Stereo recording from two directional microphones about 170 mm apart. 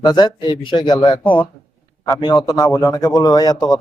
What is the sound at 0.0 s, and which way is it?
Speech, 25° left (ahead or behind).